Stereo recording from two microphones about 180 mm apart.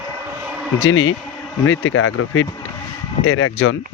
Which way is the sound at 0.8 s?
90° left.